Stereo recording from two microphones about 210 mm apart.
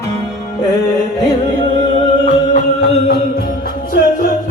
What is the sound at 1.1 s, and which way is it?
Music, 20° left (ahead or behind).